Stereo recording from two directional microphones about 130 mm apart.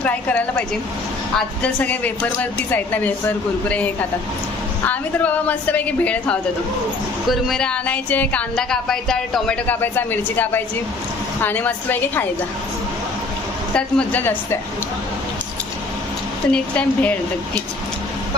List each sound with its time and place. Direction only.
0.0 s speech: 10° left (ahead or behind)
4.9 s a woman's voice: 10° left (ahead or behind)
9.8 s speech: 15° left (ahead or behind)
13.7 s speech: 10° left (ahead or behind)
16.5 s speech: 10° left (ahead or behind)